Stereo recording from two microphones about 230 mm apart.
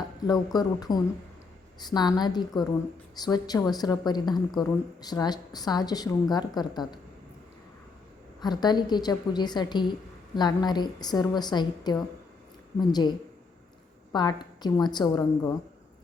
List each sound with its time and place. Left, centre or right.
0.2 s a woman's voice: centre
8.4 s a woman's voice: centre